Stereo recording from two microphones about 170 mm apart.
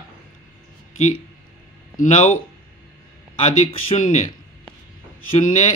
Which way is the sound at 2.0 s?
45° left (ahead or behind).